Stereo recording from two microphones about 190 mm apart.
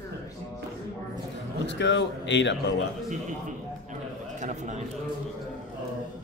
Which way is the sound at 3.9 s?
40° right (ahead or behind).